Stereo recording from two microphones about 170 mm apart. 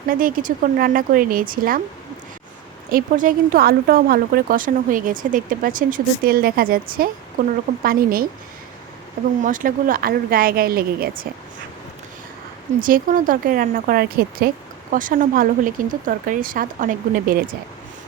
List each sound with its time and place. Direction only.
0.1 s speech: 55° right (ahead or behind)
2.9 s speech: 55° right (ahead or behind)
9.4 s speech: 50° right (ahead or behind)
12.8 s speech: 50° right (ahead or behind)
14.9 s speech: 50° right (ahead or behind)